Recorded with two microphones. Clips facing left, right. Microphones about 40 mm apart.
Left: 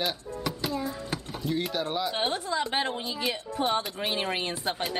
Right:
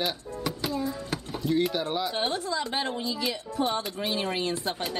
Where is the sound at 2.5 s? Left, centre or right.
Left.